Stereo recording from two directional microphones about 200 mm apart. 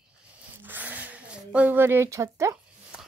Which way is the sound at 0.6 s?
10° right (ahead or behind).